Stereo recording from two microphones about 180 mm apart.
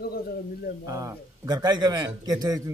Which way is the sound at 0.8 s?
15° right (ahead or behind).